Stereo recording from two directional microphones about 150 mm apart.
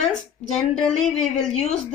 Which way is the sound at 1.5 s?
45° left (ahead or behind).